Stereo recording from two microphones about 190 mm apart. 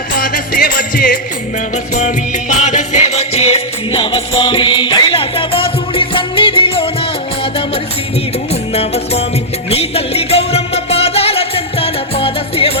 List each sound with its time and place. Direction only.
0.2 s music: 50° left (ahead or behind); by 7.1 s 30° left (ahead or behind)
8.7 s music: 30° left (ahead or behind)